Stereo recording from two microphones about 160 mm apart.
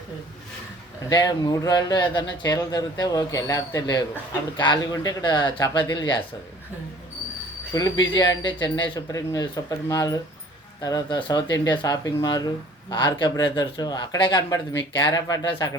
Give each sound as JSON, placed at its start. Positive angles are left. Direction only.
{"t": 1.1, "sound": "speech", "side_deg": 25}
{"t": 7.7, "sound": "speech", "side_deg": 20}